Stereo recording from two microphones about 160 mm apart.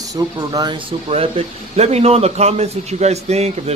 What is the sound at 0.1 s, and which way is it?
Speech, 25° right (ahead or behind).